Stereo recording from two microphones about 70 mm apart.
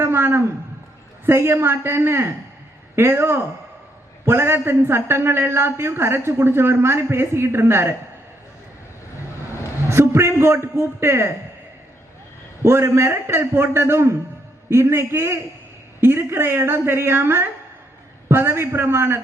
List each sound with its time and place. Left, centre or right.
0.0 s a man's voice: right
9.9 s a man's voice: right
12.6 s a man's voice: right